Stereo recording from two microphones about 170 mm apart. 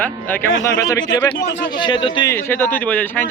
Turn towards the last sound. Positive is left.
turn(degrees=10)  # may be behind; listen again after turning